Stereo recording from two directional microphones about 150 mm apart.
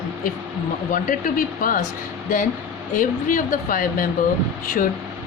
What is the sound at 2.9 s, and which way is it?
Speech, 60° left (ahead or behind).